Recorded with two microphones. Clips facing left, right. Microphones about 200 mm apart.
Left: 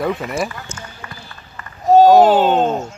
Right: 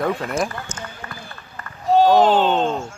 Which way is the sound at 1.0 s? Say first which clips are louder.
Even; 35° right (ahead or behind).